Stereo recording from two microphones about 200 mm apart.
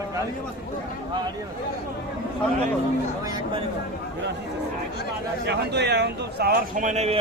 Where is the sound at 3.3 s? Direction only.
25° right (ahead or behind).